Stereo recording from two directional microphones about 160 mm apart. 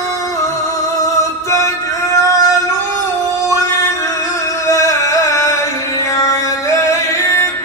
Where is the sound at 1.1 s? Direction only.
20° left (ahead or behind).